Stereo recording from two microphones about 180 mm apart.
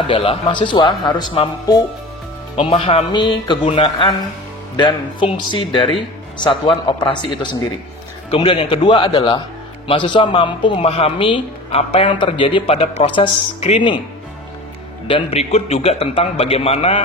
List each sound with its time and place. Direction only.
0.0 s speech: 30° left (ahead or behind)
15.0 s a man's voice: 30° left (ahead or behind)